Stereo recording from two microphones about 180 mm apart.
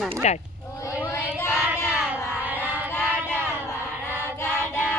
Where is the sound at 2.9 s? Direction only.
10° left (ahead or behind).